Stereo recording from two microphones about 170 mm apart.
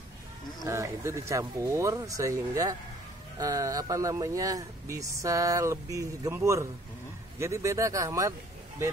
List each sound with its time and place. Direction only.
0.7 s speech: 15° right (ahead or behind)